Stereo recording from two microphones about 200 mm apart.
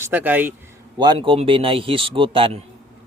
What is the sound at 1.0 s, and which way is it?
Speech, 25° right (ahead or behind).